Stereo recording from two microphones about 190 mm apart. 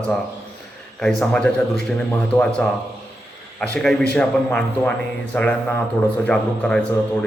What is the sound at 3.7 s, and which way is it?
A man's voice, 5° left (ahead or behind).